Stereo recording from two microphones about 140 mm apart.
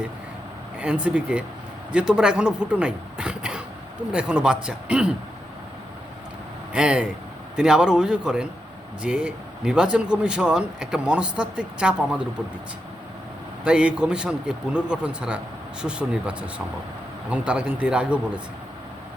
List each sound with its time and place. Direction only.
0.8 s speech: 10° right (ahead or behind)
6.7 s a man's voice: 5° right (ahead or behind)
13.7 s speech: 5° right (ahead or behind)